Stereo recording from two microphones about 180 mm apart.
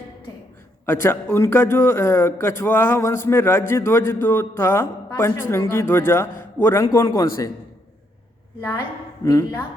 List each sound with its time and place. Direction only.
0.9 s a man's voice: 15° left (ahead or behind)
9.2 s a man's voice: 15° left (ahead or behind)